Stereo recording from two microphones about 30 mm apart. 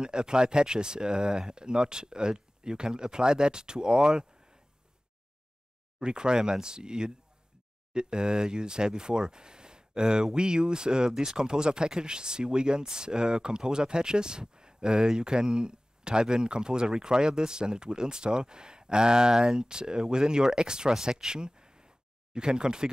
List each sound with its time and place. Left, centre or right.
0.0 s speech: right
5.9 s speech: right
21.4 s a sound: right